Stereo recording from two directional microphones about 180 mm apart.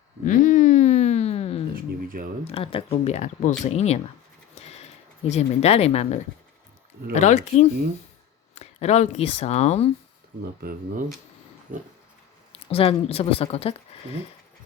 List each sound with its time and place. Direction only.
0.3 s a sound: 45° left (ahead or behind)
1.7 s speech: 50° right (ahead or behind)
2.4 s a woman's voice: 35° left (ahead or behind)
4.5 s printer: 35° left (ahead or behind)
5.3 s a woman's voice: 35° left (ahead or behind)
10.6 s speech: 55° right (ahead or behind)
12.6 s a woman's voice: 30° left (ahead or behind)